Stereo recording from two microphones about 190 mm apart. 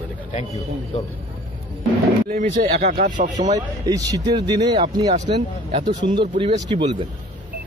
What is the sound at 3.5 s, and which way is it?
Speech, 20° right (ahead or behind).